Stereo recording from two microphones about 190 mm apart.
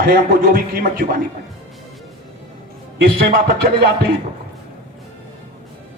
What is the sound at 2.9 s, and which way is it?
Music, 55° right (ahead or behind).